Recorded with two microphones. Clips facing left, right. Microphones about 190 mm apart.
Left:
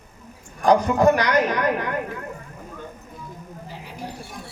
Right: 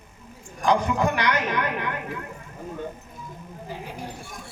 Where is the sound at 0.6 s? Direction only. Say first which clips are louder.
Left 5 dB; 40° left (ahead or behind).